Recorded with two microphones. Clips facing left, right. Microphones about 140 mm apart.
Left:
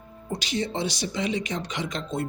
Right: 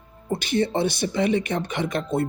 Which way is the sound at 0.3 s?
55° right (ahead or behind).